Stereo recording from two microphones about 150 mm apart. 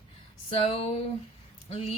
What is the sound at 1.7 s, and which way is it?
Speech, 40° left (ahead or behind).